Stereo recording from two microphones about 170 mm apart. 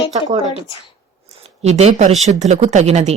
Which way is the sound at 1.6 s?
40° right (ahead or behind).